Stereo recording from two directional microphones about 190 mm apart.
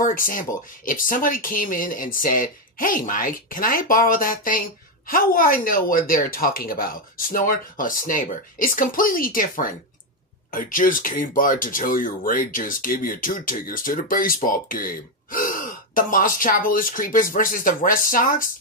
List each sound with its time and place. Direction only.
0.0 s speech: 45° left (ahead or behind)